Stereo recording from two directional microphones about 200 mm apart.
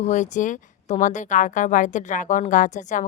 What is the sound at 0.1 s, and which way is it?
Speech, 40° left (ahead or behind).